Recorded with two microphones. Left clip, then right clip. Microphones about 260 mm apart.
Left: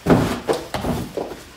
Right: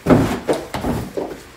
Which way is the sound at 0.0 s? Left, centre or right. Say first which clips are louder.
Right 2 dB; centre.